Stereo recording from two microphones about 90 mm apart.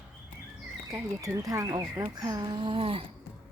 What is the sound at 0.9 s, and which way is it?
Speech, 35° right (ahead or behind).